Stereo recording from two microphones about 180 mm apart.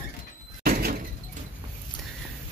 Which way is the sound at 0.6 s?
55° right (ahead or behind).